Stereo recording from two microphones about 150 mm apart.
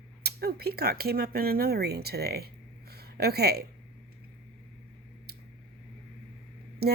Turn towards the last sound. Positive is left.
turn(degrees=-90)